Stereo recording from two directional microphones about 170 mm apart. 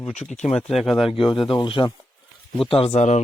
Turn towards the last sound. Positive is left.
turn(degrees=45)  # may be behind; listen again after turning